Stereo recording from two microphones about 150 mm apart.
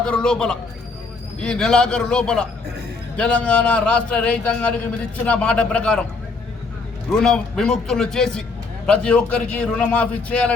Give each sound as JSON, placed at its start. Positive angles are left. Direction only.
{"t": 0.0, "sound": "a man's voice", "side_deg": 5}
{"t": 7.2, "sound": "a man's voice", "side_deg": 5}